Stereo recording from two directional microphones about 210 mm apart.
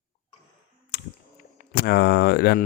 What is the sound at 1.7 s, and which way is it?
Speech, 50° left (ahead or behind).